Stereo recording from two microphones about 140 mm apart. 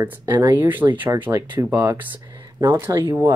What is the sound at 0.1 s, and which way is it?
Speech, 15° right (ahead or behind).